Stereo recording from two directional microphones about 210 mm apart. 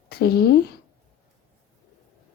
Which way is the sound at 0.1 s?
50° left (ahead or behind).